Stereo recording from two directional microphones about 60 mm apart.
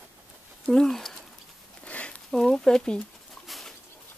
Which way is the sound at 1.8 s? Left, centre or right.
Left.